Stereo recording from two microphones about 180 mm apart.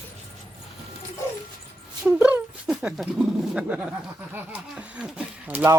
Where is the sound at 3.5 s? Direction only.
5° right (ahead or behind).